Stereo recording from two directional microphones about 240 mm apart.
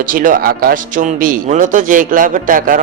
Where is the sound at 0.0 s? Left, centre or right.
Right.